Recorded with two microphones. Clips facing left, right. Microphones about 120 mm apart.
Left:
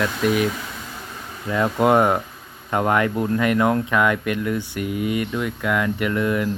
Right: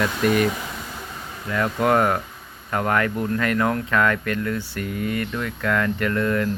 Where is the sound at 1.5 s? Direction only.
20° left (ahead or behind).